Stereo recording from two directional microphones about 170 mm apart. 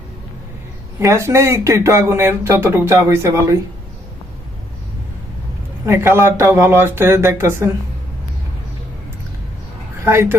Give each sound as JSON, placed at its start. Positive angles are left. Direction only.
{"t": 0.9, "sound": "speech", "side_deg": -15}
{"t": 5.8, "sound": "speech", "side_deg": -15}
{"t": 10.0, "sound": "speech", "side_deg": -15}